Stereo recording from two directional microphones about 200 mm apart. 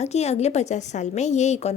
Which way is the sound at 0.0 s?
30° left (ahead or behind).